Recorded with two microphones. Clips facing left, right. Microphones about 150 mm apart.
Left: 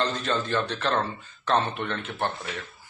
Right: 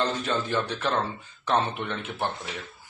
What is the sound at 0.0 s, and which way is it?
Speech, 10° right (ahead or behind).